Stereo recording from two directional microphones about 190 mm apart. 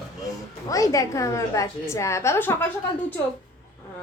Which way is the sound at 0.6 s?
20° left (ahead or behind).